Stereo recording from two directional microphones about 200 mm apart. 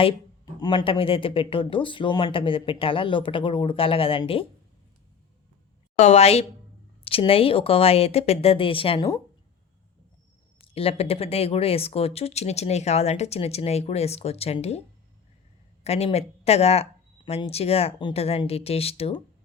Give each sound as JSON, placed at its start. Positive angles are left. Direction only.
{"t": 0.6, "sound": "speech", "side_deg": 20}
{"t": 6.0, "sound": "speech", "side_deg": 35}
{"t": 10.6, "sound": "speech", "side_deg": 30}
{"t": 15.8, "sound": "speech", "side_deg": 30}